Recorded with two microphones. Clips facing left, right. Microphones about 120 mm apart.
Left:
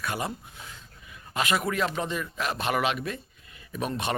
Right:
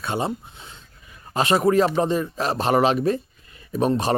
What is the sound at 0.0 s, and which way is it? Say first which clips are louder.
Speech: right 6 dB; 25° right (ahead or behind).